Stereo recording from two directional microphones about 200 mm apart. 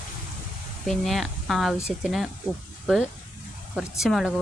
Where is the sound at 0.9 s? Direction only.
Centre (ahead or behind).